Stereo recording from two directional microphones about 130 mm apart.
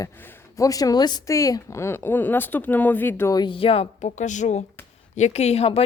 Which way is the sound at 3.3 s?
40° left (ahead or behind).